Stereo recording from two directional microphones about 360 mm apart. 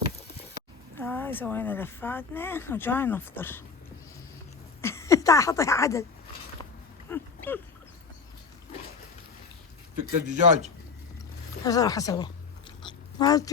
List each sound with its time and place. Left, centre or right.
0.9 s speech: centre
4.8 s speech: centre
7.1 s a sound: centre
10.2 s a man's voice: centre
11.6 s speech: centre
12.8 s dog: centre